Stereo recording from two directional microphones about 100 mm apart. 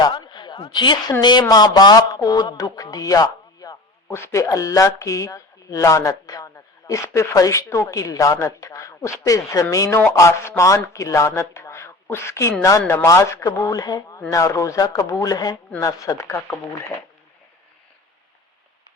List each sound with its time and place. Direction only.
0.0 s speech: 45° left (ahead or behind)
4.1 s a man's voice: 25° left (ahead or behind)